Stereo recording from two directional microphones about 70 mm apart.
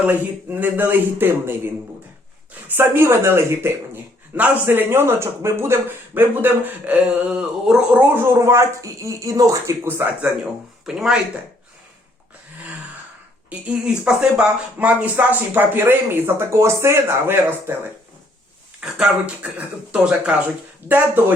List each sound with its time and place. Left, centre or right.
0.0 s speech: right
8.1 s speech: right
10.8 s speech: centre
13.5 s speech: centre
18.8 s speech: centre
20.8 s speech: right